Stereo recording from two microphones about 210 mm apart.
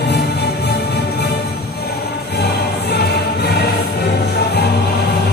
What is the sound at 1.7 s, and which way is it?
Music, 50° left (ahead or behind).